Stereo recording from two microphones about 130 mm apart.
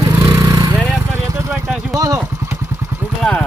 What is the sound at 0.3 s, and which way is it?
Lawn mower, 30° right (ahead or behind).